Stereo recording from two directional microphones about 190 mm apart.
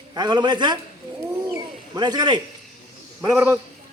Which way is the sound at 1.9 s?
20° right (ahead or behind).